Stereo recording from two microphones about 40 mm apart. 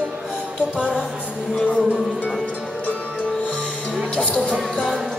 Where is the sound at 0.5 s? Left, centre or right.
Right.